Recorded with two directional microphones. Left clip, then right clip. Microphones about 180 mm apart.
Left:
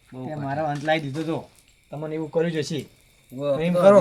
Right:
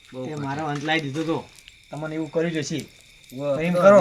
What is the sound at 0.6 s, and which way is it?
Speech, 35° left (ahead or behind).